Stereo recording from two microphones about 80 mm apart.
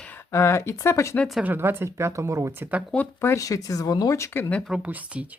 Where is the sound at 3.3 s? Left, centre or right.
Left.